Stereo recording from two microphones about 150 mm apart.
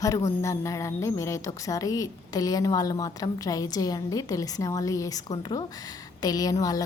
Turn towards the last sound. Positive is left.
turn(degrees=25)  # may be behind; listen again after turning